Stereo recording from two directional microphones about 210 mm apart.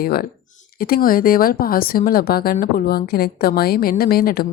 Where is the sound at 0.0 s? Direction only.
45° left (ahead or behind).